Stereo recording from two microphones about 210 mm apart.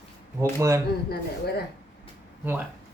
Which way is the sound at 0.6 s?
15° right (ahead or behind).